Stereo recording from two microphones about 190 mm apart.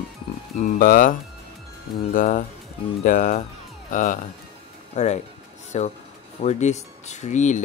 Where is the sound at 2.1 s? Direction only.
45° left (ahead or behind).